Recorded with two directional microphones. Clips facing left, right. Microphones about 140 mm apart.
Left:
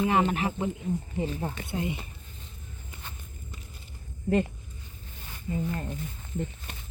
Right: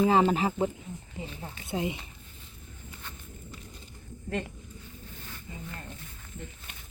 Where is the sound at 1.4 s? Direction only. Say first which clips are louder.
Left 9 dB; 55° left (ahead or behind).